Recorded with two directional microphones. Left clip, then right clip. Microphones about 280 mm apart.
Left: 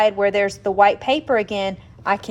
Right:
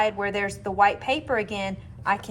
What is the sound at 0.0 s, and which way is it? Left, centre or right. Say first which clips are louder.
A woman's voice: left 8 dB; left.